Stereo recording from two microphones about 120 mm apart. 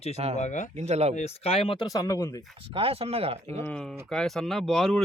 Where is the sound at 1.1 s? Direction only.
60° left (ahead or behind).